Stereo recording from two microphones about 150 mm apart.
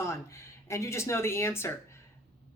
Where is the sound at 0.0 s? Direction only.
20° left (ahead or behind).